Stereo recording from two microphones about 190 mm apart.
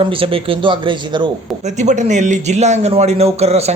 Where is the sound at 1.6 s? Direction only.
40° right (ahead or behind).